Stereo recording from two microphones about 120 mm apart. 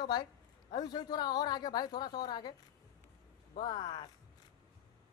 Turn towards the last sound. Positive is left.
turn(degrees=40)  # may be behind; listen again after turning